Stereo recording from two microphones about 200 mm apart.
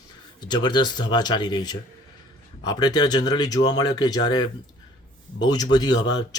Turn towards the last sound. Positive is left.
turn(degrees=20)  # may be behind; listen again after turning